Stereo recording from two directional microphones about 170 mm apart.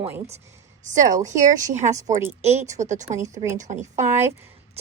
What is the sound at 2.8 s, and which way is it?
Speech, 45° right (ahead or behind).